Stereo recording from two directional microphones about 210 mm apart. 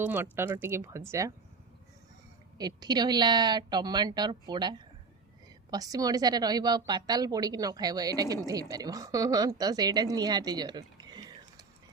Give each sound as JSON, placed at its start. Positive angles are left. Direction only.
{"t": 0.0, "sound": "a woman's voice", "side_deg": -10}
{"t": 2.6, "sound": "a woman's voice", "side_deg": -20}